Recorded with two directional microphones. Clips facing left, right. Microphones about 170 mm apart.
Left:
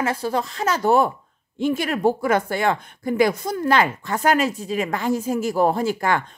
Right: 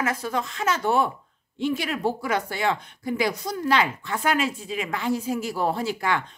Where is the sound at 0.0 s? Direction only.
30° left (ahead or behind).